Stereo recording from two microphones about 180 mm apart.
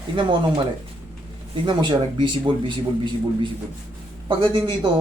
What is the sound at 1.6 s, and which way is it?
A man's voice, 25° right (ahead or behind).